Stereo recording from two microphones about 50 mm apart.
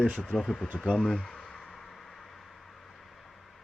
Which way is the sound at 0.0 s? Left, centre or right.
Centre.